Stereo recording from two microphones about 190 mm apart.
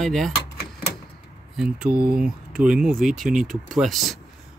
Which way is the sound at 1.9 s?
55° right (ahead or behind).